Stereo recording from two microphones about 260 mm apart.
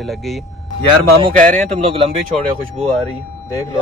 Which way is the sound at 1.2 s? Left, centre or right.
Right.